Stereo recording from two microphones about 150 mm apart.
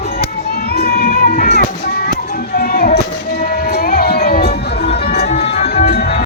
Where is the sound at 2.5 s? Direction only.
90° left.